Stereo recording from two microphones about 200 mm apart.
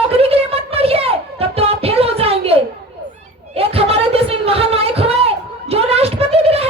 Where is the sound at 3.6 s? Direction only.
30° right (ahead or behind).